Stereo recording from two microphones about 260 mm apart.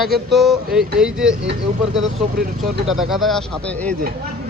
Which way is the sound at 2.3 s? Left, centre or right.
Centre.